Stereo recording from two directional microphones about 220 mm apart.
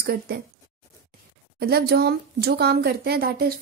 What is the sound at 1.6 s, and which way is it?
Speech, 45° right (ahead or behind).